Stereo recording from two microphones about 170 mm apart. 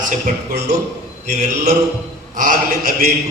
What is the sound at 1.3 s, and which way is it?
A man's voice, 45° right (ahead or behind).